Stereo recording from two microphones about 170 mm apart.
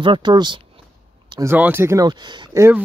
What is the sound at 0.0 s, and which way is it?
Speech, 30° right (ahead or behind).